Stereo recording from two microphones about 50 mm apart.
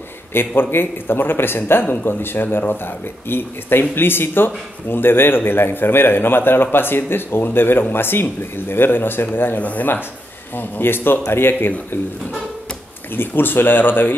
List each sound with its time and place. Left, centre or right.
0.3 s a man's voice: left
9.6 s a man's voice: left
13.1 s a man's voice: left